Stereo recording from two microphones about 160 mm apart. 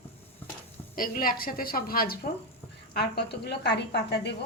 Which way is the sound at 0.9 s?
60° left (ahead or behind).